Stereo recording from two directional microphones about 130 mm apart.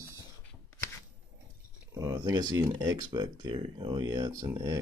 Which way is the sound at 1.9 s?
25° right (ahead or behind).